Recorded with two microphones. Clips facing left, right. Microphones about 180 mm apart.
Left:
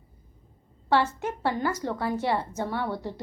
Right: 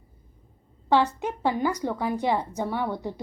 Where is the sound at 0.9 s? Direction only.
15° right (ahead or behind).